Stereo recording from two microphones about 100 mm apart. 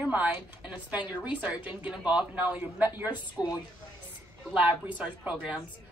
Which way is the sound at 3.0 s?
45° left (ahead or behind).